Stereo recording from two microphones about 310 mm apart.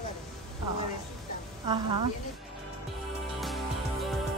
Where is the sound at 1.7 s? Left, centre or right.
Centre.